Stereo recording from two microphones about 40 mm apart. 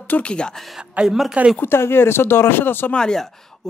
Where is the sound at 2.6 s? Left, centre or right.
Left.